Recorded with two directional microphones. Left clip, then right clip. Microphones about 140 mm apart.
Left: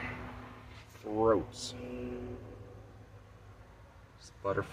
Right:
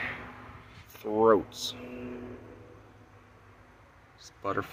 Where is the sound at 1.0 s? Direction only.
85° right.